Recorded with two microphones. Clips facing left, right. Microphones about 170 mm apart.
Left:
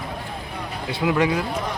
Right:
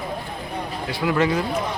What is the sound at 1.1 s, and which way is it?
Speech, 10° left (ahead or behind).